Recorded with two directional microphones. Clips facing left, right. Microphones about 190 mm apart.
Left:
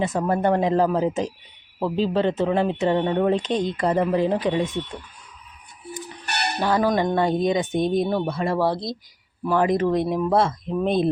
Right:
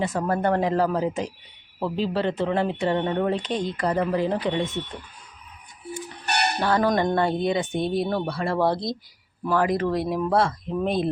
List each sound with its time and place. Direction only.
0.0 s speech: 20° left (ahead or behind)
6.6 s speech: 15° left (ahead or behind)
8.5 s speech: 5° left (ahead or behind)
9.6 s speech: 20° left (ahead or behind)